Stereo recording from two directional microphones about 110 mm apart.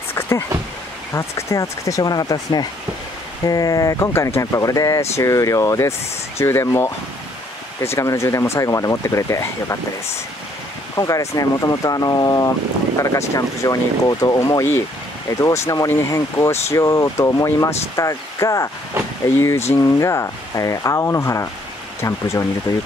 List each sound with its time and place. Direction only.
0.1 s a sound: 25° left (ahead or behind)
1.1 s speech: 25° left (ahead or behind)
11.0 s speech: 30° left (ahead or behind)